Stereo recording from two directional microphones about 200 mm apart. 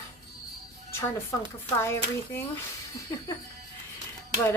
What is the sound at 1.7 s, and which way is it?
Speech, 15° left (ahead or behind).